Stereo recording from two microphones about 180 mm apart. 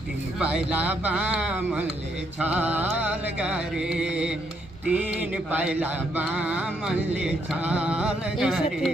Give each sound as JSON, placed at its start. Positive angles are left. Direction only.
{"t": 0.4, "sound": "mantra", "side_deg": -5}